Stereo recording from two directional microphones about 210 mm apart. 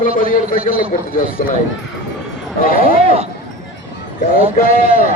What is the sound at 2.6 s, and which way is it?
Speech, 45° left (ahead or behind).